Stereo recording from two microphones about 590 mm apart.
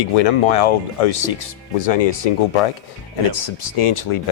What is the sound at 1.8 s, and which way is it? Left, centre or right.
Speech, left.